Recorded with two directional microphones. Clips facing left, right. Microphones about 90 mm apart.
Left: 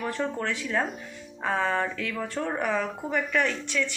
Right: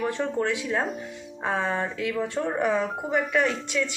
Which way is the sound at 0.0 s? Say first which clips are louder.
Right 3 dB; 25° right (ahead or behind).